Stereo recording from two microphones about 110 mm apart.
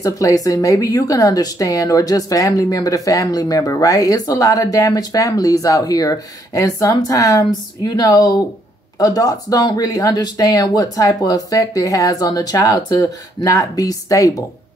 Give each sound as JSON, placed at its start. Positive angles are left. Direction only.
{"t": 0.0, "sound": "speech", "side_deg": 30}